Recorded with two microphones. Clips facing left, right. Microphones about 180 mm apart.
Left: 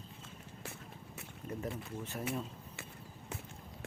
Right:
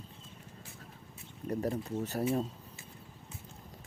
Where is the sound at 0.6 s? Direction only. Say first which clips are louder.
Left 3 dB; 70° left (ahead or behind).